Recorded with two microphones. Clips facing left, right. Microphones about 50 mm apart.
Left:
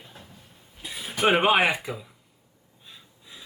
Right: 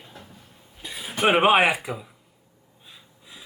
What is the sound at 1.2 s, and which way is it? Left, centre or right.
Speech, centre.